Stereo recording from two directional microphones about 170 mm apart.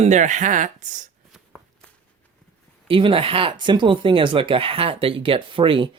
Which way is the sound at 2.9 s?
30° right (ahead or behind).